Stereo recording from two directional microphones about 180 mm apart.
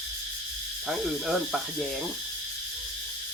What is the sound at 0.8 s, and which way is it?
Speech, centre (ahead or behind).